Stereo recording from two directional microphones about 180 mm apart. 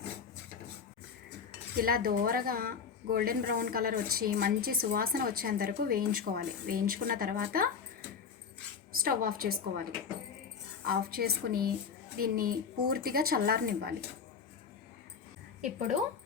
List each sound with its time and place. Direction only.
1.7 s a woman's voice: 55° right (ahead or behind)
9.0 s a woman's voice: 55° right (ahead or behind)
10.8 s speech: 55° right (ahead or behind)